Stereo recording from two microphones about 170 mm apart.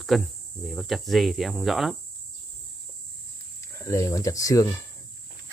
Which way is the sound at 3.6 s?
20° left (ahead or behind).